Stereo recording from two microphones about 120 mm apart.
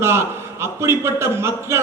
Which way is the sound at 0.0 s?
20° right (ahead or behind).